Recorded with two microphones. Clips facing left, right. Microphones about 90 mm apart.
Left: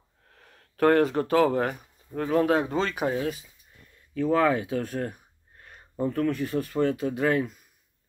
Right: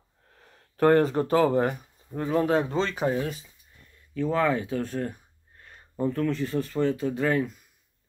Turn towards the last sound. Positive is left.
turn(degrees=10)  # may be behind; listen again after turning